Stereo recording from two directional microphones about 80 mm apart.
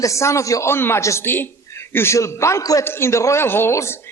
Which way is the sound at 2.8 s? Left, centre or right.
Left.